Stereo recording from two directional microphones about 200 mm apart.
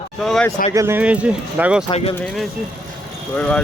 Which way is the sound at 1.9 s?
30° left (ahead or behind).